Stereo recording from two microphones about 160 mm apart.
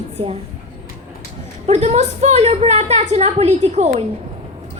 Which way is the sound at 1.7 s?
45° right (ahead or behind).